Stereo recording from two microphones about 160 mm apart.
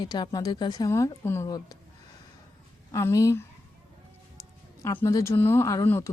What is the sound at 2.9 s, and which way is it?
Speech, 20° left (ahead or behind).